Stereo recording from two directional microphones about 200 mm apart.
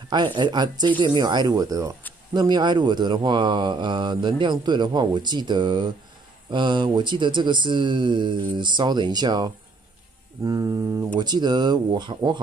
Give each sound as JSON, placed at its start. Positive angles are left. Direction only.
{"t": 0.1, "sound": "speech", "side_deg": -20}
{"t": 10.4, "sound": "a sound", "side_deg": -15}
{"t": 11.1, "sound": "speech", "side_deg": -20}